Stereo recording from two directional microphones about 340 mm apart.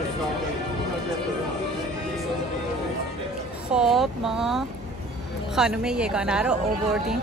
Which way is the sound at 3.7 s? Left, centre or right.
Centre.